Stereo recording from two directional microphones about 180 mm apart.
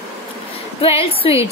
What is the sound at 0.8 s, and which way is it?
Speech, 30° left (ahead or behind).